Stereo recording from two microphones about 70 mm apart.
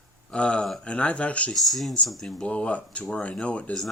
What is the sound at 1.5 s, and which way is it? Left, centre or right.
Speech, centre.